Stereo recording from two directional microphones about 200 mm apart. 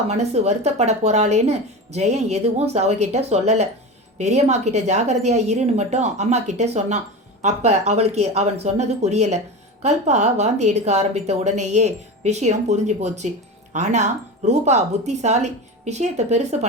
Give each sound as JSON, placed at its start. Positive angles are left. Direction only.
{"t": 0.1, "sound": "speech", "side_deg": -35}